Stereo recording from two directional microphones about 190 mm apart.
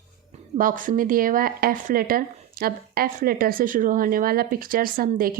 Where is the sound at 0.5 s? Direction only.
45° right (ahead or behind).